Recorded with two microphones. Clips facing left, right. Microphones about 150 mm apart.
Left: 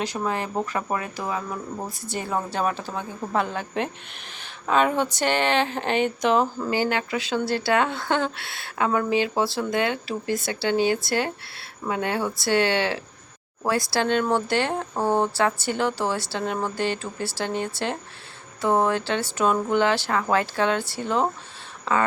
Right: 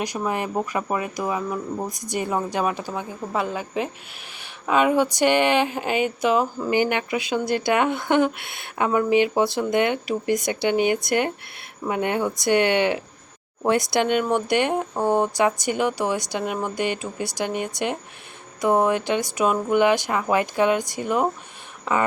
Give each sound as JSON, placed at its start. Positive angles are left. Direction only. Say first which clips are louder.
{"t": 0.0, "sound": "speech", "louder": "right 1 dB", "side_deg": -15}
{"t": 6.7, "sound": "speech", "louder": "right 3 dB", "side_deg": -20}